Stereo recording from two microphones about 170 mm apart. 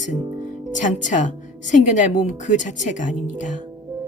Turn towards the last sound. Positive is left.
turn(degrees=45)  # may be behind; listen again after turning